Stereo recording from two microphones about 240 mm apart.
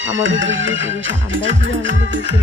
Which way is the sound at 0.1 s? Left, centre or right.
Right.